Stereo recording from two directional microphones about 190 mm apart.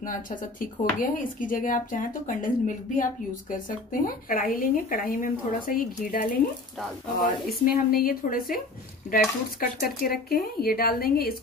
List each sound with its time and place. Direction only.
0.0 s speech: 45° left (ahead or behind)
7.4 s speech: 50° left (ahead or behind)